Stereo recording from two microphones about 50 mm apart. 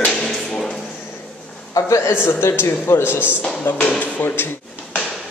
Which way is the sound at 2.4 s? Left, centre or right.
Left.